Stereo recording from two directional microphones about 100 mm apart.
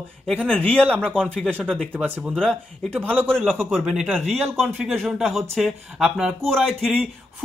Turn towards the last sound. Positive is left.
turn(degrees=5)  # may be behind; listen again after turning